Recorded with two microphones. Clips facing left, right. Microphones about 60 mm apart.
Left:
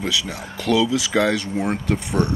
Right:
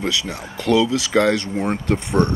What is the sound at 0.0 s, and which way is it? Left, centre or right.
Speech, centre.